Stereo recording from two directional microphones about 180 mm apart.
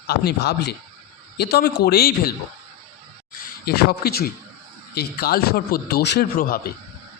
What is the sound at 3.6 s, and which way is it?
A man's voice, 60° left (ahead or behind).